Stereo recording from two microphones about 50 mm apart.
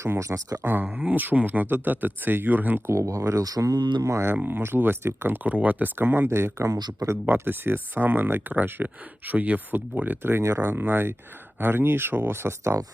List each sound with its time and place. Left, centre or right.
0.6 s speech: right
0.9 s speech: right
1.1 s speech: right
2.8 s speech: right
4.4 s speech: right
5.4 s speech: right
6.0 s speech: right
6.2 s speech: right
7.3 s speech: right